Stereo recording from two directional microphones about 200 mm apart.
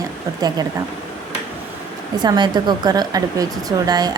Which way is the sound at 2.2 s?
20° right (ahead or behind).